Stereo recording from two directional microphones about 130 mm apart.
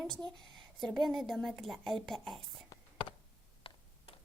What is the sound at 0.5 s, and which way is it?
A woman's voice, centre (ahead or behind).